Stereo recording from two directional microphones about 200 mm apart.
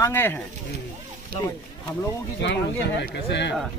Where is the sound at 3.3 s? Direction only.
60° left (ahead or behind).